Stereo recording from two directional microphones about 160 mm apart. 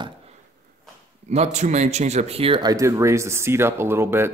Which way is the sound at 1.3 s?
45° right (ahead or behind).